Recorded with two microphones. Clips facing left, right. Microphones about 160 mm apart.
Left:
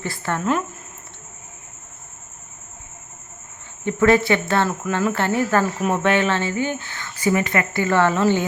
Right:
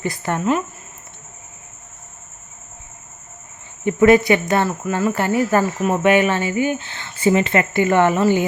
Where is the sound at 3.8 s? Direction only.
10° right (ahead or behind).